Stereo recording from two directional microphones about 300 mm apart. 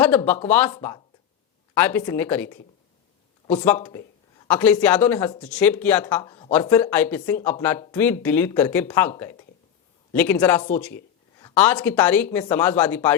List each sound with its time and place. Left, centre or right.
0.0 s speech: centre
4.4 s speech: centre